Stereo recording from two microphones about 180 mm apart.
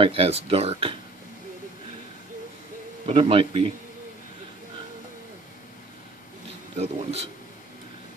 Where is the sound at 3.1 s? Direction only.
30° right (ahead or behind).